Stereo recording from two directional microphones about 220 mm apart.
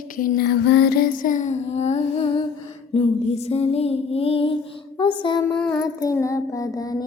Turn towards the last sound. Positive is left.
turn(degrees=15)  # may be behind; listen again after turning